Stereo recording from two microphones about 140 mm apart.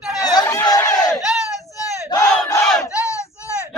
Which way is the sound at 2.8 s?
20° left (ahead or behind).